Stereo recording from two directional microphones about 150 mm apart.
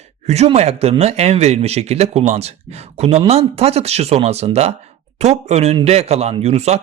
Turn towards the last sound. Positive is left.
turn(degrees=-45)  # may be behind; listen again after turning